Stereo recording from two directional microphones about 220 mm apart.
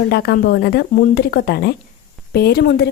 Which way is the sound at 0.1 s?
45° left (ahead or behind).